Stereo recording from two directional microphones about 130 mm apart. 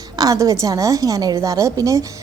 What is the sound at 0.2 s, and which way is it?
A woman's voice, 25° right (ahead or behind).